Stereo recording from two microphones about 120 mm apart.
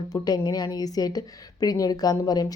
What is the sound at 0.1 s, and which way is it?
A woman's voice, 35° left (ahead or behind).